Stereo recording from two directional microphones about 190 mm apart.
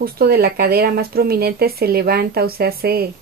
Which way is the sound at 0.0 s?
55° right (ahead or behind).